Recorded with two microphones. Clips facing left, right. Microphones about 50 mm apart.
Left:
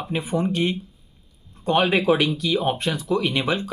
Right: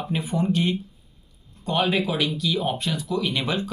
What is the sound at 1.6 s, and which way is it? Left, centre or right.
Speech, left.